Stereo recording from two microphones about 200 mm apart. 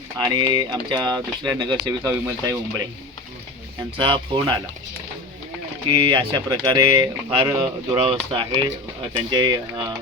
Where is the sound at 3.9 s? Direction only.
25° right (ahead or behind).